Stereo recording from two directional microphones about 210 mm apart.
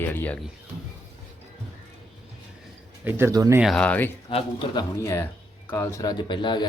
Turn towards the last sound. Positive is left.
turn(degrees=20)  # may be behind; listen again after turning